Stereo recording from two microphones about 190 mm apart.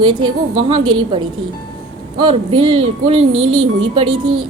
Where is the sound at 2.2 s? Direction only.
25° right (ahead or behind).